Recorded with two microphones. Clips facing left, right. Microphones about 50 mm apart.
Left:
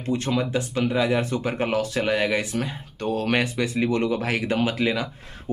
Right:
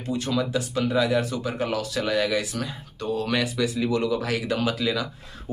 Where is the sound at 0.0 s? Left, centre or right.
Left.